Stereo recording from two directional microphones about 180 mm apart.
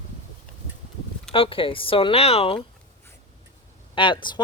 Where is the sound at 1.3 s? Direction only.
30° left (ahead or behind).